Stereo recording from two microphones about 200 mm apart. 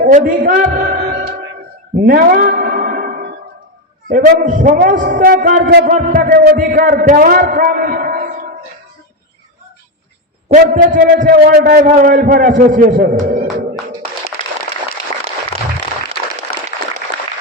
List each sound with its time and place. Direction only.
0.0 s a man's voice: 45° right (ahead or behind)
2.0 s a sound: 50° right (ahead or behind)
4.1 s a man's voice: 40° right (ahead or behind)
10.5 s a man's voice: 40° right (ahead or behind)